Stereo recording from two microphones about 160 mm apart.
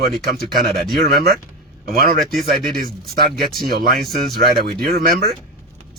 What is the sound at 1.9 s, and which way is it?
Speech, 70° right (ahead or behind).